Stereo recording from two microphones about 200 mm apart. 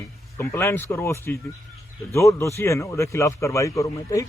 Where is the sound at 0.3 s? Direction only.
15° left (ahead or behind).